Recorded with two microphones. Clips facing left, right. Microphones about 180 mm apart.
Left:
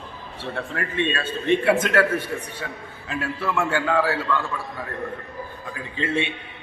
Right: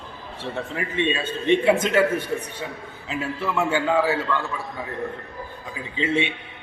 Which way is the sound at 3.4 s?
10° right (ahead or behind).